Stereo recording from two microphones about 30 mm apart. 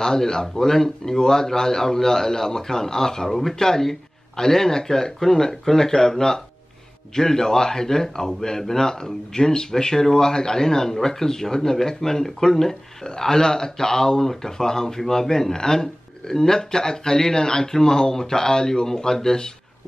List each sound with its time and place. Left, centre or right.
0.0 s speech: centre
3.3 s speech: centre
3.5 s speech: centre